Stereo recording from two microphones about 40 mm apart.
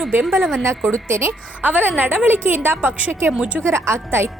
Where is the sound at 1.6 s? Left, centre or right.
Right.